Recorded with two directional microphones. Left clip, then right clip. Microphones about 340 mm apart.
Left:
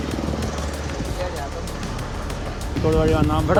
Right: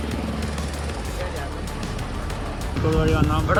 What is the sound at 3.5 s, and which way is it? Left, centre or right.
Speech, centre.